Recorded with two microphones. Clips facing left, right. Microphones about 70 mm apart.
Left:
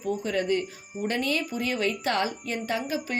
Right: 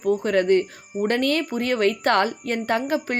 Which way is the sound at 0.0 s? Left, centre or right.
Right.